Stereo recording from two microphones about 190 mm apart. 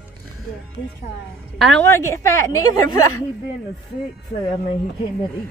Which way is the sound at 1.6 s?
10° left (ahead or behind).